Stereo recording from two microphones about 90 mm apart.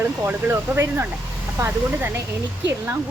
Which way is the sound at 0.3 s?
25° right (ahead or behind).